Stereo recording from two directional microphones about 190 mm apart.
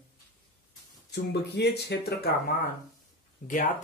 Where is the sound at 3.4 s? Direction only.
40° left (ahead or behind).